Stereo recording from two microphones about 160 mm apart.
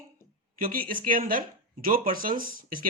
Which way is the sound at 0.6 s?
60° right (ahead or behind).